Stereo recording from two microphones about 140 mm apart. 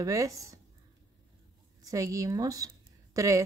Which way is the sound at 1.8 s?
25° right (ahead or behind).